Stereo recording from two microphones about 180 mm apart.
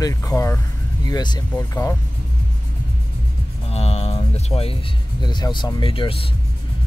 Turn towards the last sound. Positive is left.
turn(degrees=30)  # may be behind; listen again after turning